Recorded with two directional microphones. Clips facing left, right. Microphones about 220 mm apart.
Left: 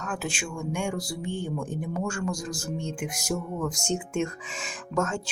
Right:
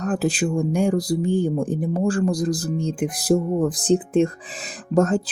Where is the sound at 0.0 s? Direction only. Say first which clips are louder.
Right 11 dB; 35° right (ahead or behind).